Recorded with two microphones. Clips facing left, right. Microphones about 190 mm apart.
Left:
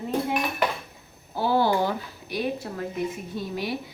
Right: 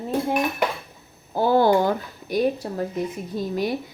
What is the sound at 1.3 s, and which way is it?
A woman's voice, 50° right (ahead or behind).